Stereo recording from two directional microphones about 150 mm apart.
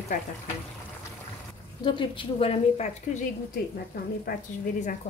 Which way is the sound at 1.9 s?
35° left (ahead or behind).